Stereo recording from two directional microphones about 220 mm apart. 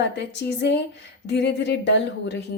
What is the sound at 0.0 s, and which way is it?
Speech, 50° left (ahead or behind).